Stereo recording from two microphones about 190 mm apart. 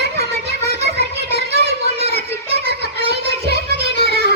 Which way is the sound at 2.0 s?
35° right (ahead or behind).